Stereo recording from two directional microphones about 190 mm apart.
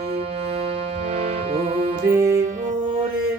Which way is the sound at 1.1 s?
30° right (ahead or behind).